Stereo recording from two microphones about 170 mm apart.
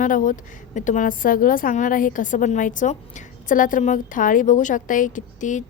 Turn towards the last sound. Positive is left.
turn(degrees=50)  # may be behind; listen again after turning